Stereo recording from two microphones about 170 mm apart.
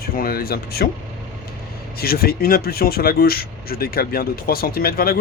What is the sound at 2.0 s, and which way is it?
Speech, 60° left (ahead or behind).